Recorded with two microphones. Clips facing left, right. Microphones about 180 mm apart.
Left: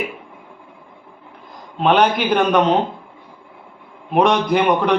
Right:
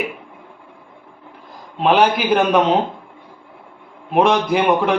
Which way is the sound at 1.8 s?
Centre (ahead or behind).